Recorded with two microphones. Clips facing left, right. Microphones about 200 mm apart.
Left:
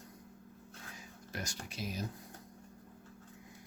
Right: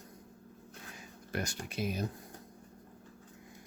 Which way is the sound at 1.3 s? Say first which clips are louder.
Right 6 dB; 60° right (ahead or behind).